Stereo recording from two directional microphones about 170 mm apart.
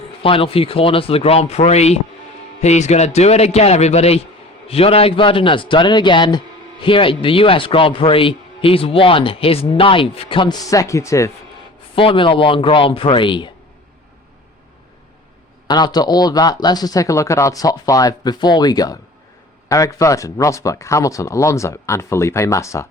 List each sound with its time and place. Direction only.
0.2 s a man's voice: 30° left (ahead or behind)
11.9 s a man's voice: 30° left (ahead or behind)
15.6 s speech: 25° left (ahead or behind)